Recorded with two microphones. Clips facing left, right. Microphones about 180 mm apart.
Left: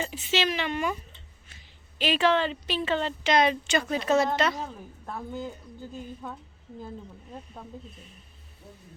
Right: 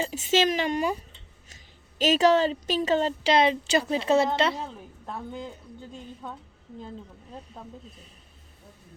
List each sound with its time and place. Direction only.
0.0 s a woman's voice: 45° right (ahead or behind)
4.6 s a woman's voice: 5° left (ahead or behind)